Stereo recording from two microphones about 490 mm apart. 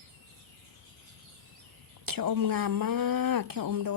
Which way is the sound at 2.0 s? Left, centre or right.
Right.